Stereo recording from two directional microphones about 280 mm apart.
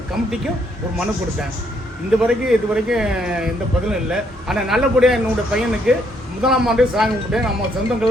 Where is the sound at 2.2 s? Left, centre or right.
Centre.